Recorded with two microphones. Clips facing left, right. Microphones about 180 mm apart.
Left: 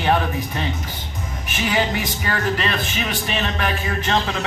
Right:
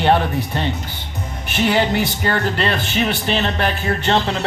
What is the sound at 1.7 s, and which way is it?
Speech, 65° right (ahead or behind).